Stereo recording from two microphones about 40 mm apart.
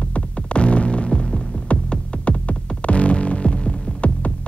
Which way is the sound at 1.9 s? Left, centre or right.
Left.